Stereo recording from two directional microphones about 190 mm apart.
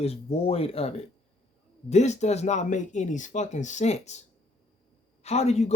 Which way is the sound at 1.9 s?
35° left (ahead or behind).